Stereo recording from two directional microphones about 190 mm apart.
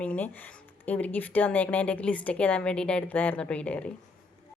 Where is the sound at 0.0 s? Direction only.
5° left (ahead or behind).